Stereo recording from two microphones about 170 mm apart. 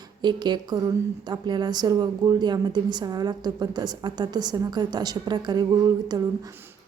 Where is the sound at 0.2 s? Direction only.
25° right (ahead or behind).